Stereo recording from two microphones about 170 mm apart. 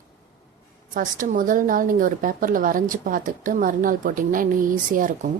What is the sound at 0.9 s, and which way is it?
Speech, 50° right (ahead or behind).